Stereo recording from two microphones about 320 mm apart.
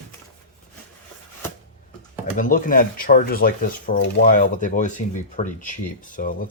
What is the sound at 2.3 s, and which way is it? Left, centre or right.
Speech, left.